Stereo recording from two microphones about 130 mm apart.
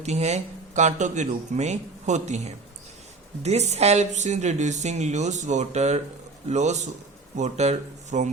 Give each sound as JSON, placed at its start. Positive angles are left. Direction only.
{"t": 0.0, "sound": "a woman's voice", "side_deg": -60}